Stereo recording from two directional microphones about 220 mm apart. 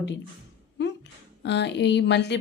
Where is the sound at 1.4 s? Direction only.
50° left (ahead or behind).